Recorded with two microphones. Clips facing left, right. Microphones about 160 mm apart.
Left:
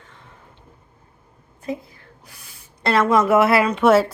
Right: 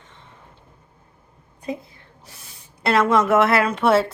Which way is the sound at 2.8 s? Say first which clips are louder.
Left 1 dB; centre (ahead or behind).